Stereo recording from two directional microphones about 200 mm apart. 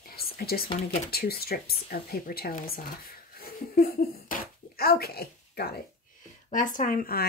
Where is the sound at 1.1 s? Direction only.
50° left (ahead or behind).